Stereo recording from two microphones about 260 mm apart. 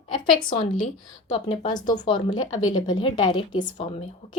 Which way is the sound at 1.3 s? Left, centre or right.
Centre.